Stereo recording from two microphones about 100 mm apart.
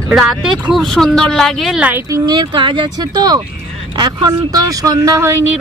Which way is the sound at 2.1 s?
40° right (ahead or behind).